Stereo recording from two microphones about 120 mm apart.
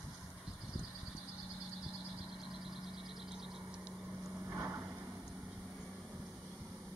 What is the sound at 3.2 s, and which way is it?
Vehicle, 5° right (ahead or behind).